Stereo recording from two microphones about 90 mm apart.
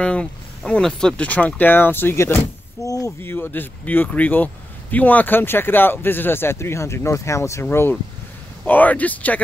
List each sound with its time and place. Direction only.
0.0 s speech: 10° left (ahead or behind)
2.8 s a sound: 40° left (ahead or behind)
3.2 s speech: 25° left (ahead or behind)